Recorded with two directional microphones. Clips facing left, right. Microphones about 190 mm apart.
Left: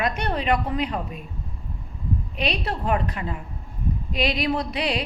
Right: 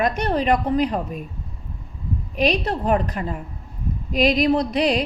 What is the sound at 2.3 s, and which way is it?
A woman's voice, 40° right (ahead or behind).